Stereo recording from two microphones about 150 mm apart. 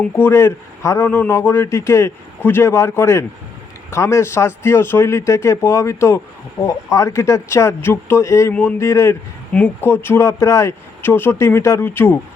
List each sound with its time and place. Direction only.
0.0 s a man's voice: 15° left (ahead or behind)